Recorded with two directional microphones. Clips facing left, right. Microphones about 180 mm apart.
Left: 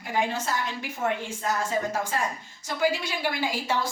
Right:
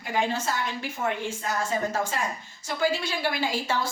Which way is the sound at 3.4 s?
15° left (ahead or behind).